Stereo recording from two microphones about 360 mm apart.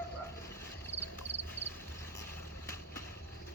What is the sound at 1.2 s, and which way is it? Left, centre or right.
Frog, centre.